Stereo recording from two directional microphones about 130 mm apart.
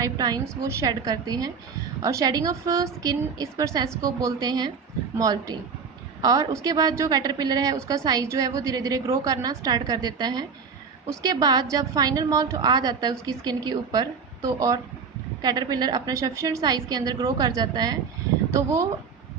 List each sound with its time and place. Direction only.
0.0 s a woman's voice: 30° right (ahead or behind)